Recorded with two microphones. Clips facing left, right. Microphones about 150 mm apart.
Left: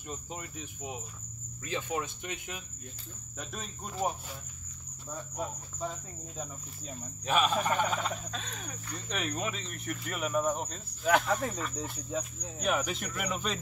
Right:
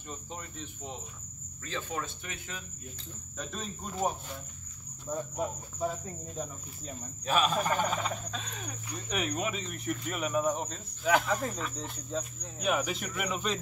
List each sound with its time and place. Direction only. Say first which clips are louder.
0.1 s speech: left 1 dB; 10° left (ahead or behind)
3.3 s frog: right 3 dB; 5° left (ahead or behind)
5.8 s frog: right 5 dB; 5° right (ahead or behind)